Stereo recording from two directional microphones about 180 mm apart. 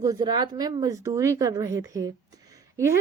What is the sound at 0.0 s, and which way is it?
A woman's voice, 20° right (ahead or behind).